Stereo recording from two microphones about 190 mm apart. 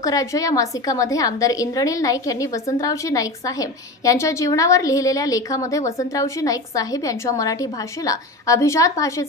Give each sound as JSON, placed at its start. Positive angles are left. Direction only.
{"t": 0.0, "sound": "a woman's voice", "side_deg": 15}